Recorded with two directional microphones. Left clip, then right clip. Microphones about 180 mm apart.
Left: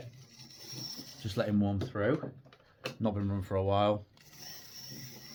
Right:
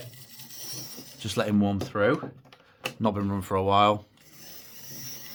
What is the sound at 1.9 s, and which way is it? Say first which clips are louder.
Typing: right 9 dB; 55° right (ahead or behind).